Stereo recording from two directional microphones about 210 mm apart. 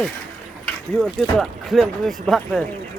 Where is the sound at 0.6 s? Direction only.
5° left (ahead or behind).